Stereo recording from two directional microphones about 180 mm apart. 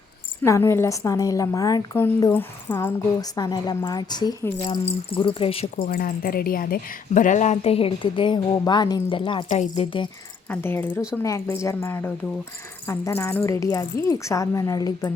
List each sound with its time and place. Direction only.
0.4 s a woman's voice: 15° left (ahead or behind); by 5.9 s 35° left (ahead or behind)
5.9 s a woman's voice: 55° left (ahead or behind); by 10.1 s 30° left (ahead or behind)
10.5 s a woman's voice: 10° left (ahead or behind)